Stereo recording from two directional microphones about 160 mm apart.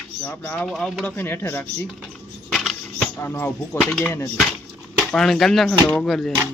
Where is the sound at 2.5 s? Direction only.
Centre (ahead or behind).